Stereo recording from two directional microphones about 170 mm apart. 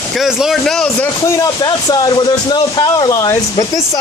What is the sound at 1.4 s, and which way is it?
Speech, 25° left (ahead or behind).